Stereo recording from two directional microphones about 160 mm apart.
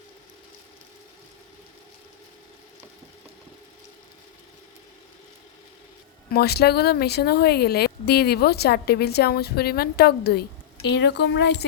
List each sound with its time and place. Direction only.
6.3 s speech: 85° left